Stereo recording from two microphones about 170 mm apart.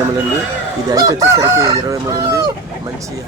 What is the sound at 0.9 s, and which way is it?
Chicken, 20° right (ahead or behind).